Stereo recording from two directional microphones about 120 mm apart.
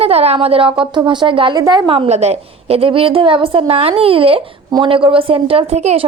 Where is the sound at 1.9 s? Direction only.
60° right (ahead or behind).